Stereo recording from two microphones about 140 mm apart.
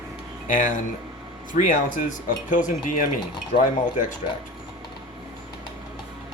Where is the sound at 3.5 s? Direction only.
75° left (ahead or behind).